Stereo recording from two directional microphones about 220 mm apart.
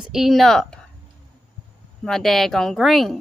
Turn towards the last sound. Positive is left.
turn(degrees=0)  # may be behind; listen again after turning